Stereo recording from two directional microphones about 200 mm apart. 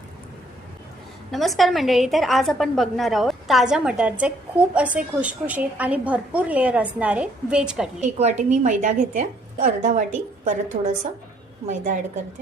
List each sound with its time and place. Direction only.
1.3 s a woman's voice: centre (ahead or behind)
8.0 s a woman's voice: 35° right (ahead or behind)